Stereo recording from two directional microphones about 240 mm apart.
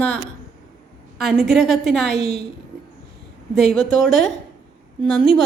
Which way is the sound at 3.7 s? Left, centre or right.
Centre.